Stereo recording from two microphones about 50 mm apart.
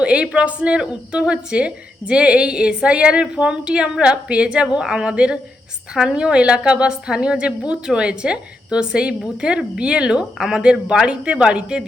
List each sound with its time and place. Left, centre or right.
0.0 s a woman's voice: right